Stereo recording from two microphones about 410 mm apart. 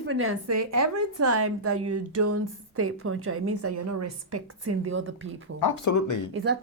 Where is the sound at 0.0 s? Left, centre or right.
Right.